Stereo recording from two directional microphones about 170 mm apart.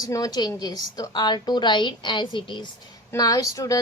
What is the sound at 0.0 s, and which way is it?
A woman's voice, 20° left (ahead or behind).